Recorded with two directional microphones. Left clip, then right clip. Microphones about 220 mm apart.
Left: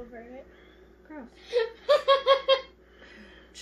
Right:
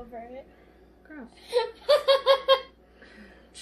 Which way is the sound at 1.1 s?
20° right (ahead or behind).